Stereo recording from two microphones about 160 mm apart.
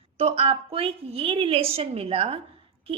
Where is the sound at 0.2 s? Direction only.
40° right (ahead or behind).